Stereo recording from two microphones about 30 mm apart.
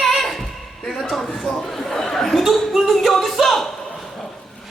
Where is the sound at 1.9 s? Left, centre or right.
Centre.